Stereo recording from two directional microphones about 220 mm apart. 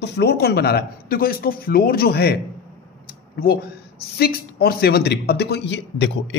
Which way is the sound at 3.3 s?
45° left (ahead or behind).